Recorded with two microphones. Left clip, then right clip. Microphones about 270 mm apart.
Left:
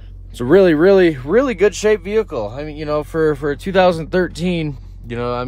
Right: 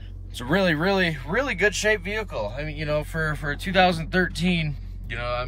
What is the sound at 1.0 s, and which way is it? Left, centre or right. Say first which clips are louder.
Speech: left 10 dB; left.